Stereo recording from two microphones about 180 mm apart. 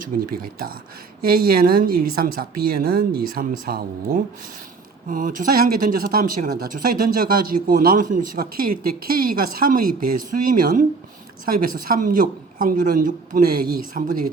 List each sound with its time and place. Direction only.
0.1 s speech: 45° right (ahead or behind)
1.2 s a woman's voice: 55° right (ahead or behind)